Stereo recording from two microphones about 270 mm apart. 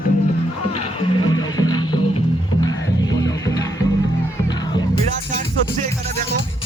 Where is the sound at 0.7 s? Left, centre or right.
Left.